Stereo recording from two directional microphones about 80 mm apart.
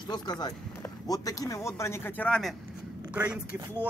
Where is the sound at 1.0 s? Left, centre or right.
Left.